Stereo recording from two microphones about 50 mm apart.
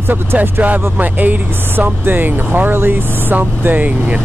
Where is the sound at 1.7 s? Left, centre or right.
Right.